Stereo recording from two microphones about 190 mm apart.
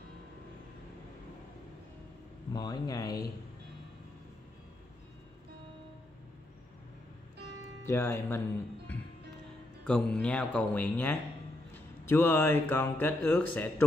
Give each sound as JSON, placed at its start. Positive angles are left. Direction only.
{"t": 2.5, "sound": "speech", "side_deg": 20}
{"t": 7.8, "sound": "speech", "side_deg": 15}
{"t": 9.8, "sound": "speech", "side_deg": 5}